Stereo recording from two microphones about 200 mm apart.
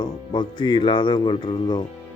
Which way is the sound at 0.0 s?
20° left (ahead or behind).